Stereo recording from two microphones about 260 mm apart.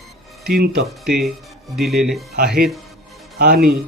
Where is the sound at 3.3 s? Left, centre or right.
Right.